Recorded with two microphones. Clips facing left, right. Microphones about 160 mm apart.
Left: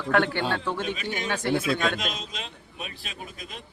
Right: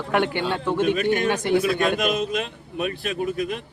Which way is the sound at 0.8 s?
55° right (ahead or behind).